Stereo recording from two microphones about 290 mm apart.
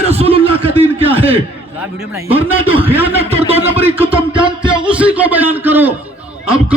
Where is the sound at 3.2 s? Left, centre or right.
Centre.